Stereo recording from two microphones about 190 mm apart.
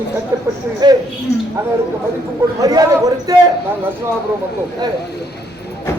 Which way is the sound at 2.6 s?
20° right (ahead or behind).